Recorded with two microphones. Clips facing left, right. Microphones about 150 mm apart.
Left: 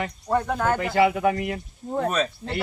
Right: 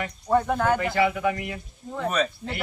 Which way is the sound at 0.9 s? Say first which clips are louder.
Left 3 dB; 30° left (ahead or behind).